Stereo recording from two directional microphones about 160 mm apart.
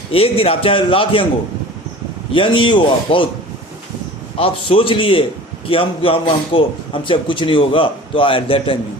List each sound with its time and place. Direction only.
0.1 s a man's voice: 35° left (ahead or behind)
2.3 s a man's voice: 30° left (ahead or behind)
4.4 s a man's voice: 35° left (ahead or behind)